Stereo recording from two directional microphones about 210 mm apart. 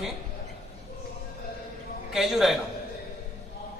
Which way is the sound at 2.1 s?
Centre (ahead or behind).